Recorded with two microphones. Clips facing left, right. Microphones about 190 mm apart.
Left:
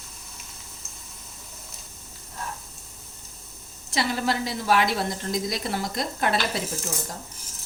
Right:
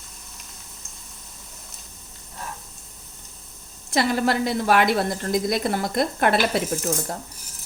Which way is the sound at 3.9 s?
55° right (ahead or behind).